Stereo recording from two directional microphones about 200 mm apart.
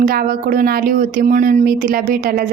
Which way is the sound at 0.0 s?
45° right (ahead or behind).